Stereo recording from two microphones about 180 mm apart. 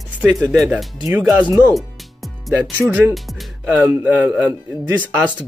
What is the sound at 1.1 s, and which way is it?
Speech, 10° right (ahead or behind).